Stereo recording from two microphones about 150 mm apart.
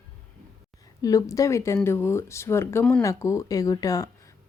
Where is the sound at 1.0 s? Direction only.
25° left (ahead or behind).